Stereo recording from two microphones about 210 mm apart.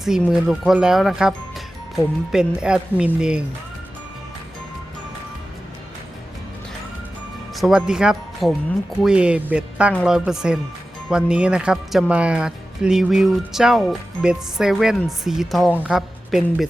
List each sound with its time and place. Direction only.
0.0 s speech: centre (ahead or behind)
7.5 s speech: centre (ahead or behind)